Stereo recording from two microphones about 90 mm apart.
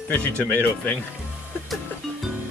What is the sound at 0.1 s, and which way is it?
Speech, 20° left (ahead or behind).